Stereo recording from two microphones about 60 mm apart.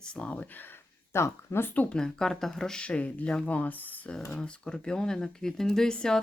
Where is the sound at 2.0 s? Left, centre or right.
Centre.